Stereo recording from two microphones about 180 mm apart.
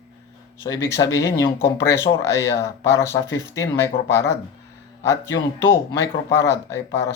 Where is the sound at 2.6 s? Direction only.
15° left (ahead or behind).